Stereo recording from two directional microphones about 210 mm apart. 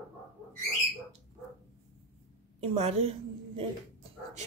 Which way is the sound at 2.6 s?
30° right (ahead or behind).